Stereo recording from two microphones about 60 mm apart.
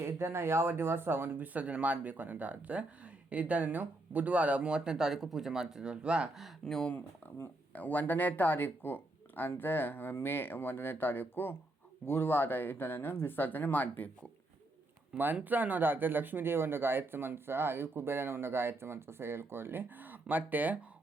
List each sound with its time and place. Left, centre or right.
0.0 s speech: right; by 6.3 s centre
6.7 s speech: centre
7.7 s speech: left
15.1 s speech: centre
15.4 s speech: right